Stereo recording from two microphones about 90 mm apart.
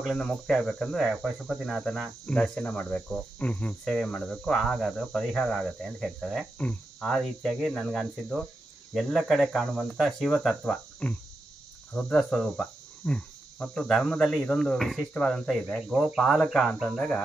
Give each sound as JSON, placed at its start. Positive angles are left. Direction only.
{"t": 0.0, "sound": "speech", "side_deg": 0}
{"t": 6.6, "sound": "speech", "side_deg": 15}
{"t": 7.1, "sound": "speech", "side_deg": 0}
{"t": 11.9, "sound": "cricket", "side_deg": 5}
{"t": 15.9, "sound": "speech", "side_deg": -5}
{"t": 16.8, "sound": "cricket", "side_deg": 10}